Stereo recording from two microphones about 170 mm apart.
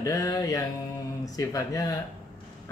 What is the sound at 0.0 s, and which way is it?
Speech, 20° left (ahead or behind).